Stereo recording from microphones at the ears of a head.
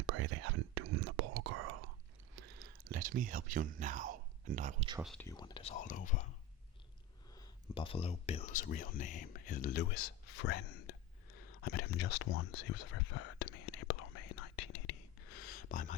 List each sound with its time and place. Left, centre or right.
0.0 s whispering: right
5.5 s whispering: left
7.8 s a sound: left